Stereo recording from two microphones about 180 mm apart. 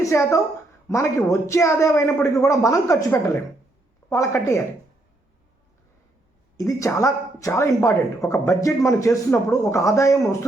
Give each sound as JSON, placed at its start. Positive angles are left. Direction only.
{"t": 0.0, "sound": "a woman's voice", "side_deg": 15}
{"t": 6.6, "sound": "speech", "side_deg": 20}